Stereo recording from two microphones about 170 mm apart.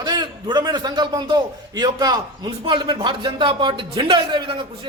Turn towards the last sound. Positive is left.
turn(degrees=-30)  # may be behind; listen again after turning